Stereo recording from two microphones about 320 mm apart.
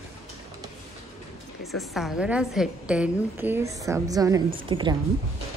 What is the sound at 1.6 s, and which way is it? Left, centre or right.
A woman's voice, centre.